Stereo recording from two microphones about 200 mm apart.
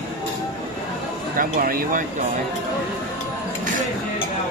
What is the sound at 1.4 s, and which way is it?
Speech, 45° right (ahead or behind).